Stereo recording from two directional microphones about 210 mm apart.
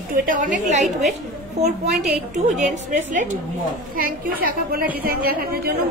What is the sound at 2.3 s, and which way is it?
A woman's voice, 35° right (ahead or behind).